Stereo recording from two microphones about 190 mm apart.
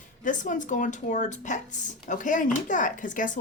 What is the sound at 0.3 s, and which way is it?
A woman's voice, 40° left (ahead or behind).